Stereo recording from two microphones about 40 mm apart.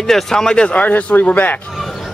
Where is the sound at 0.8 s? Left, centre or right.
Left.